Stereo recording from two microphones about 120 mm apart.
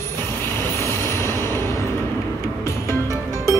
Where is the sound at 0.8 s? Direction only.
20° left (ahead or behind).